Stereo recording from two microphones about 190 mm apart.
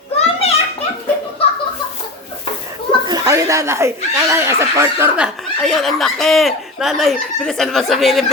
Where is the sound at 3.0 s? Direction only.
20° right (ahead or behind).